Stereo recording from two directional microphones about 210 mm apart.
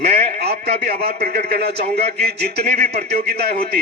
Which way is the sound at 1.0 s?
50° right (ahead or behind).